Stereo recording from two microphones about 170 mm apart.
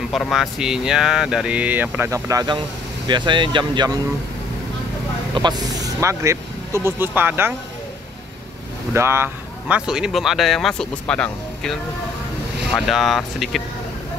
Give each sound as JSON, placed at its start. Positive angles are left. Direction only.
{"t": 0.1, "sound": "speech", "side_deg": 0}
{"t": 5.3, "sound": "speech", "side_deg": -25}
{"t": 8.9, "sound": "speech", "side_deg": -15}